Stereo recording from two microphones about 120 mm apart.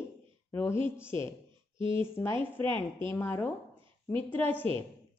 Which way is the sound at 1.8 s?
45° right (ahead or behind).